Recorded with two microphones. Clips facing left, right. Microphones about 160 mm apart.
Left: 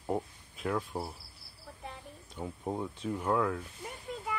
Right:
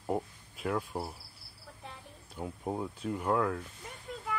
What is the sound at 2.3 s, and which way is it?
Speech, 5° right (ahead or behind).